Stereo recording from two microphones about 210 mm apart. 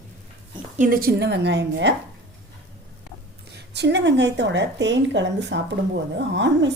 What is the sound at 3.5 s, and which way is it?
A woman's voice, 55° right (ahead or behind).